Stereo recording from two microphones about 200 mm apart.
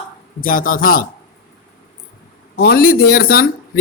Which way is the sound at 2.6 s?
50° left (ahead or behind).